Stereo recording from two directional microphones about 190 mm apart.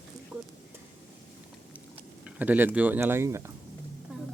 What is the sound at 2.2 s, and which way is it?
Speech, 10° right (ahead or behind).